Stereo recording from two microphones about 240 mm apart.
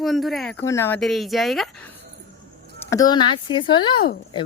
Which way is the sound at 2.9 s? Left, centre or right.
Centre.